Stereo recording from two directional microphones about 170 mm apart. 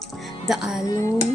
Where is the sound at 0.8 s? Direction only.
20° left (ahead or behind).